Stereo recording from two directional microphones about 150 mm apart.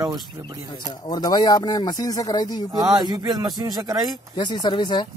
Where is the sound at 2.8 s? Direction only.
30° right (ahead or behind).